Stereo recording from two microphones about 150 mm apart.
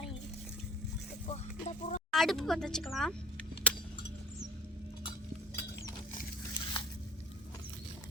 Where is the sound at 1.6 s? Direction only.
50° left (ahead or behind).